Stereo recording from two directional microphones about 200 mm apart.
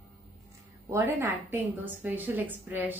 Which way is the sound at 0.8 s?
15° right (ahead or behind).